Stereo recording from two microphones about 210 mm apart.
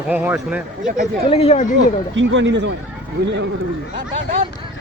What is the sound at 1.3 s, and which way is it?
Speech, 30° left (ahead or behind).